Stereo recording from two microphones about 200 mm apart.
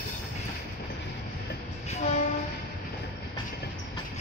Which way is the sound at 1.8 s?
35° left (ahead or behind).